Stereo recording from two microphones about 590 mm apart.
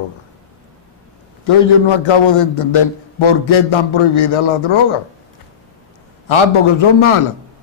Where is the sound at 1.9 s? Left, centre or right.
Left.